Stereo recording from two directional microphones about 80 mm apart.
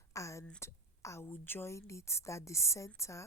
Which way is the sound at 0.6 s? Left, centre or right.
Left.